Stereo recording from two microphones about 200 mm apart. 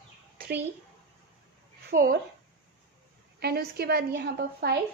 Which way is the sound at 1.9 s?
45° right (ahead or behind).